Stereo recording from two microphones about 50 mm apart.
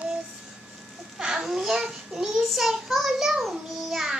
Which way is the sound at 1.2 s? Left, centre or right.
Centre.